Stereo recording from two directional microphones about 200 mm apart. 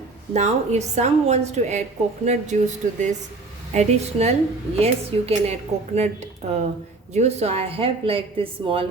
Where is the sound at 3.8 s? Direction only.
35° right (ahead or behind).